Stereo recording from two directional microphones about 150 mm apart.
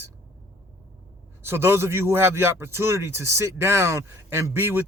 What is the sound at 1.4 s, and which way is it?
Speech, 15° right (ahead or behind).